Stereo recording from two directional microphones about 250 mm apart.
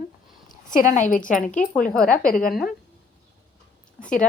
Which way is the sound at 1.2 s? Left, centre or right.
Centre.